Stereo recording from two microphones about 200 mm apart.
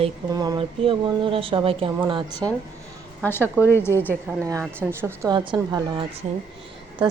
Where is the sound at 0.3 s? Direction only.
20° right (ahead or behind).